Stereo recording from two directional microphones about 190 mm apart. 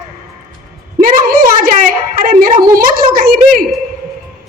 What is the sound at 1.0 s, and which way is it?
A woman's voice, 45° right (ahead or behind).